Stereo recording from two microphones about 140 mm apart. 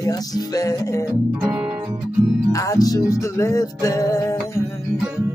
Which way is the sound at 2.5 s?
25° left (ahead or behind).